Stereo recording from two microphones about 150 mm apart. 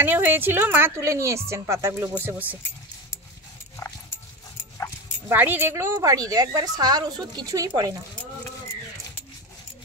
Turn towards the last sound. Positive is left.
turn(degrees=-25)  # may be behind; listen again after turning